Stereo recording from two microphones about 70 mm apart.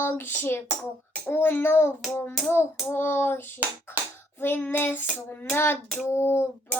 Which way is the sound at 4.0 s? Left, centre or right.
Right.